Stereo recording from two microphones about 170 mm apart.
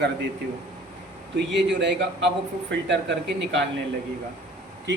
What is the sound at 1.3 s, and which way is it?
Speech, 90° right.